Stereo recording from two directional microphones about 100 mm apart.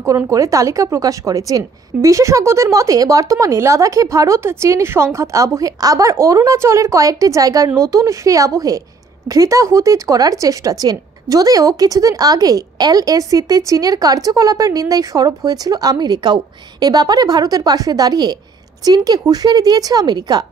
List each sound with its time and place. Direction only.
0.0 s a woman's voice: 35° right (ahead or behind)